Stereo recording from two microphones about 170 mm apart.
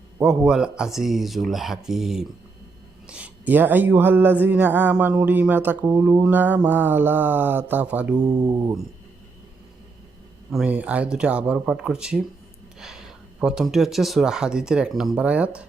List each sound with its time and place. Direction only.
0.2 s speech: 5° right (ahead or behind)
8.2 s speech: 20° right (ahead or behind)
10.5 s speech: 5° right (ahead or behind)